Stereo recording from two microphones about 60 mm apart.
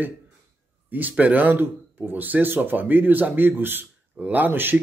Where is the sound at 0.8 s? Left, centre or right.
Right.